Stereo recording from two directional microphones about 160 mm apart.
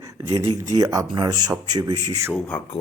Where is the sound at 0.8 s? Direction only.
25° right (ahead or behind).